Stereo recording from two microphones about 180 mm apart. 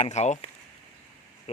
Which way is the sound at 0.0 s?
40° left (ahead or behind).